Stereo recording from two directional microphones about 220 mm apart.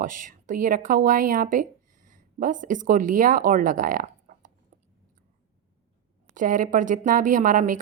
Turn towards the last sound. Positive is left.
turn(degrees=-35)  # may be behind; listen again after turning